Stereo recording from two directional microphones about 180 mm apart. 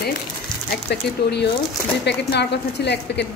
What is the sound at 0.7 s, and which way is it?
A woman's voice, 65° left (ahead or behind).